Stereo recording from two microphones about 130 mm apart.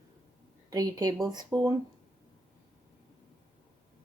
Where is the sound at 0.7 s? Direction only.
30° right (ahead or behind).